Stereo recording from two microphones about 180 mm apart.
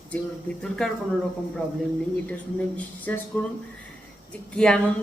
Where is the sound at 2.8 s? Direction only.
10° left (ahead or behind).